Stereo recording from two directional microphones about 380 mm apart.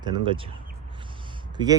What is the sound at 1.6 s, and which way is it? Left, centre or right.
Speech, centre.